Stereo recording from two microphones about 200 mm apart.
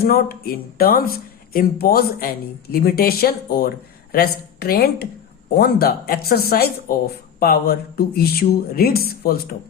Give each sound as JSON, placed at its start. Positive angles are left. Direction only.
{"t": 0.0, "sound": "speech", "side_deg": 50}